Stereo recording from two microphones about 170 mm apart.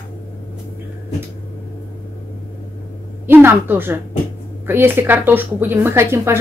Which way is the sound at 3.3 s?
10° right (ahead or behind).